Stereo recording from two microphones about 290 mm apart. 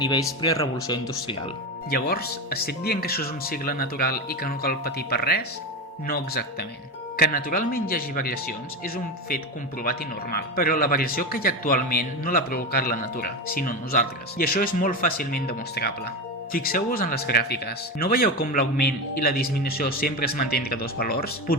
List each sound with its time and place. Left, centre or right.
0.0 s speech: centre
1.9 s speech: left